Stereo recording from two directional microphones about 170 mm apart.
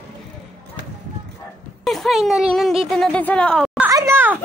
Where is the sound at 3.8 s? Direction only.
20° right (ahead or behind).